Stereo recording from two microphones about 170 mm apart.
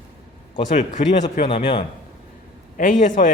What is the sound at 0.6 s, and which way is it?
Speech, 45° left (ahead or behind).